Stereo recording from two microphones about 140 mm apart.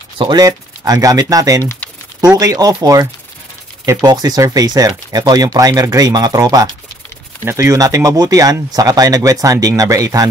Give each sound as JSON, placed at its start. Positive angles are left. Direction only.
{"t": 0.2, "sound": "speech", "side_deg": -30}